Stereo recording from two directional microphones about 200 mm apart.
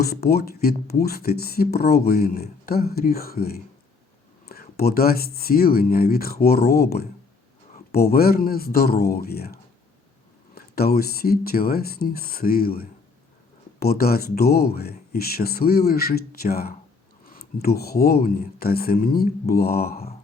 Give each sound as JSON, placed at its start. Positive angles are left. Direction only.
{"t": 0.0, "sound": "speech", "side_deg": 50}